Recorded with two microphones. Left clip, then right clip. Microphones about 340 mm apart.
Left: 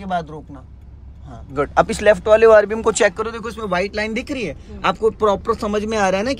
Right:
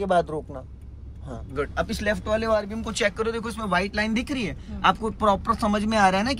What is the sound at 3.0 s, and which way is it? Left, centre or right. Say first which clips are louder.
Speech: left 6 dB; centre.